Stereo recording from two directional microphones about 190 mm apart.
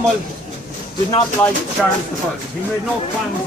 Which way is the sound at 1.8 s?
Centre (ahead or behind).